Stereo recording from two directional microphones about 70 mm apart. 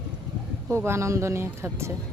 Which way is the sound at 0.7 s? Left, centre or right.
Right.